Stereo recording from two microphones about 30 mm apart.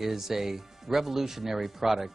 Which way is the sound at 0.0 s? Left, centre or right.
Centre.